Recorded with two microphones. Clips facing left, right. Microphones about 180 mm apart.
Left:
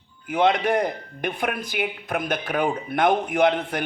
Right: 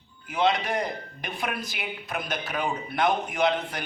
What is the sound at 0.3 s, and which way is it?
A man's voice, 55° left (ahead or behind).